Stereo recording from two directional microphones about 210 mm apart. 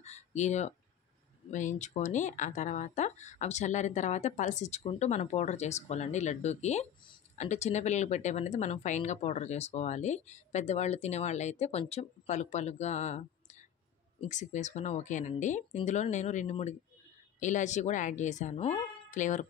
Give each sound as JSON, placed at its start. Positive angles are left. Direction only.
{"t": 0.0, "sound": "speech", "side_deg": 35}